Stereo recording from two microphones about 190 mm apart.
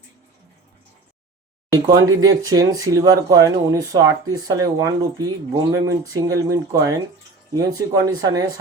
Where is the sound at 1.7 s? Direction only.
20° right (ahead or behind).